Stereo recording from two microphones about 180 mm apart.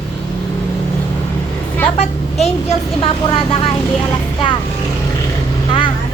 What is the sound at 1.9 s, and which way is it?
Vehicle, 35° left (ahead or behind).